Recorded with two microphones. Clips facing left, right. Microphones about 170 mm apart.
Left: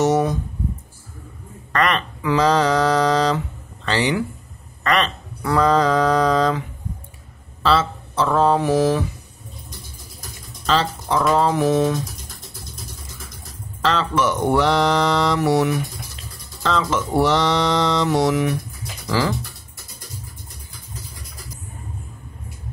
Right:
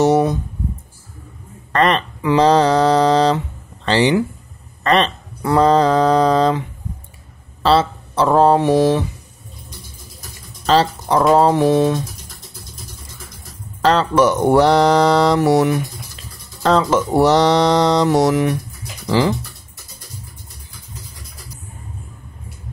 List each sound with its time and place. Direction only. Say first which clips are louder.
0.0 s mantra: right 4 dB; 30° right (ahead or behind)
1.7 s speech: right 4 dB; 30° right (ahead or behind)
7.6 s mantra: right 4 dB; 35° right (ahead or behind)
10.7 s mantra: right 5 dB; 40° right (ahead or behind)
13.8 s mantra: right 6 dB; 40° right (ahead or behind)
19.0 s speech: right 5 dB; 20° right (ahead or behind)